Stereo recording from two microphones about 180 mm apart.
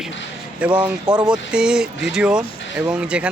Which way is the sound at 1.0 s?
25° right (ahead or behind).